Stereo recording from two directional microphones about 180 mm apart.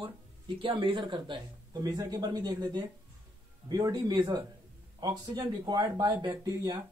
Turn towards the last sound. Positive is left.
turn(degrees=-20)  # may be behind; listen again after turning